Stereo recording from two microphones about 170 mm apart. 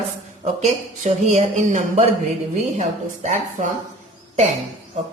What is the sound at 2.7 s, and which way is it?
Speech, 45° right (ahead or behind).